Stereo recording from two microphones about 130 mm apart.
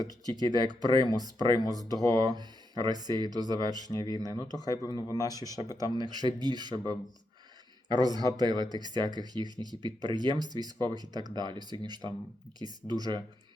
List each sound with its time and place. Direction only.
0.0 s speech: 30° left (ahead or behind)
0.4 s speech: 30° right (ahead or behind)
1.5 s speech: 30° left (ahead or behind)
2.0 s speech: 30° right (ahead or behind)
3.8 s speech: 30° left (ahead or behind)
6.1 s speech: 35° right (ahead or behind)